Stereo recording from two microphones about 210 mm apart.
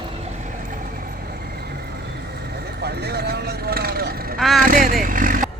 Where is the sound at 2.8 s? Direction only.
50° right (ahead or behind).